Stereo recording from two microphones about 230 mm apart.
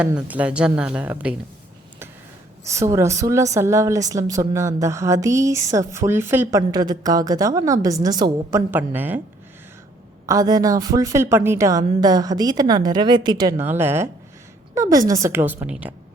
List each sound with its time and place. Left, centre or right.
0.0 s a woman's voice: centre
2.6 s speech: centre
10.2 s speech: centre